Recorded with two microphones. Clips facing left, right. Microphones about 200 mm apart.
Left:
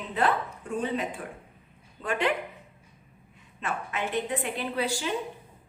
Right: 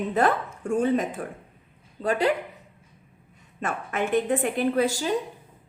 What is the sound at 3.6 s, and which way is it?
A woman's voice, 50° right (ahead or behind).